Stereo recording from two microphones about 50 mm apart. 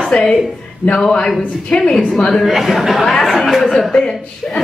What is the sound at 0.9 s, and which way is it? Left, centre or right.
A woman's voice, centre.